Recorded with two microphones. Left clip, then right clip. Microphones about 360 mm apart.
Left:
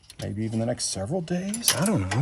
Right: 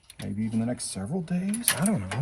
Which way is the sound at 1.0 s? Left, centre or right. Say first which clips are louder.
Left 4 dB; left.